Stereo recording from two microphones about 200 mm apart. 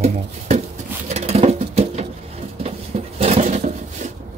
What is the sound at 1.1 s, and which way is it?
Patter, 30° right (ahead or behind).